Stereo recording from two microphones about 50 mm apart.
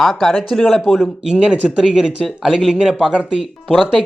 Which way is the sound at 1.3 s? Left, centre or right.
Right.